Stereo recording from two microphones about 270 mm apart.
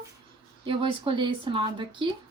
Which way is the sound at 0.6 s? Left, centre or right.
Centre.